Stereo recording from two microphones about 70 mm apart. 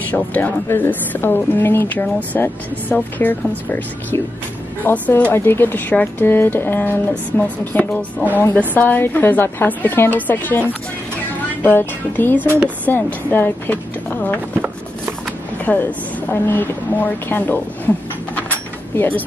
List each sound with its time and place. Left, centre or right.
0.1 s speech: left
5.3 s speech: left
15.6 s a woman's voice: left